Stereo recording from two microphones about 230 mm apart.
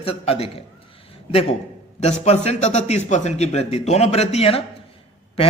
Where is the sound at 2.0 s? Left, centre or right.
Left.